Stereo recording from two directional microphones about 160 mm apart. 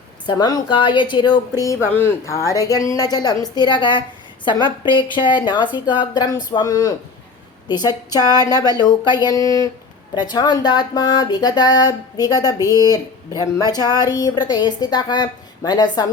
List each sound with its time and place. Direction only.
0.3 s speech: 25° left (ahead or behind)